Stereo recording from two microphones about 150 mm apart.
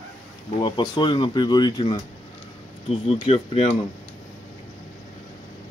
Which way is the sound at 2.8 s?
40° left (ahead or behind).